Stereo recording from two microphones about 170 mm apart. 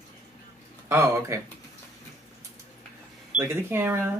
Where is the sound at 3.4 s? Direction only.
15° right (ahead or behind).